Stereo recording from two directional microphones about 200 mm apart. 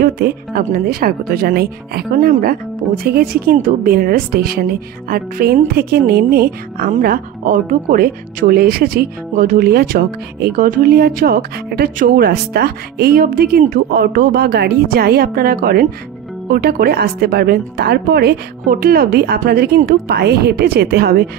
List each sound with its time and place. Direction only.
0.0 s speech: 45° right (ahead or behind)